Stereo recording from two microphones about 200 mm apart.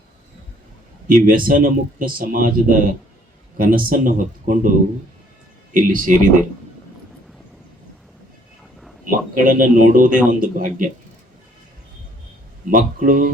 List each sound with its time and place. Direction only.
1.0 s speech: 45° right (ahead or behind)
5.7 s speech: 45° right (ahead or behind)
9.0 s speech: 40° right (ahead or behind)
12.6 s speech: 45° right (ahead or behind)